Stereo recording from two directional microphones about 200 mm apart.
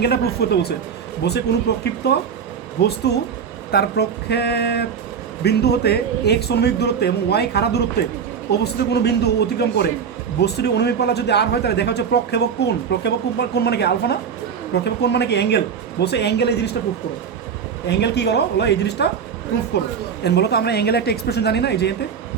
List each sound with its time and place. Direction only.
0.0 s speech: 55° left (ahead or behind)
17.8 s speech: 55° left (ahead or behind)
20.2 s speech: 55° left (ahead or behind)